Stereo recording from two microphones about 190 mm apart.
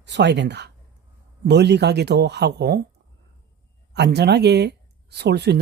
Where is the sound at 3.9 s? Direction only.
60° right (ahead or behind).